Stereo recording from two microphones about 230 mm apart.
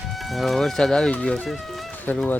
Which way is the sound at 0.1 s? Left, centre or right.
Centre.